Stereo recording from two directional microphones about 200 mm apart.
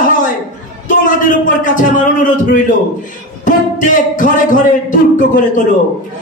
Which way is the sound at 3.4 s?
40° left (ahead or behind).